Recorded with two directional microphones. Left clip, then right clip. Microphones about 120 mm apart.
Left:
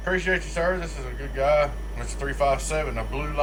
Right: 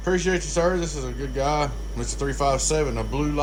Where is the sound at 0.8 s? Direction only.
30° right (ahead or behind).